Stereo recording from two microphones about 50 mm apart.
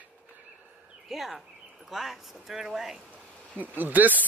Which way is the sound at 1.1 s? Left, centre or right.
Centre.